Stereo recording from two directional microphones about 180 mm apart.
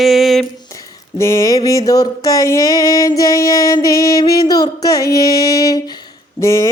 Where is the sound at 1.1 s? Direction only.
15° left (ahead or behind).